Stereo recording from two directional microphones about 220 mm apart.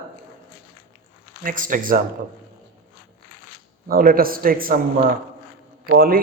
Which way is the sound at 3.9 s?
40° right (ahead or behind).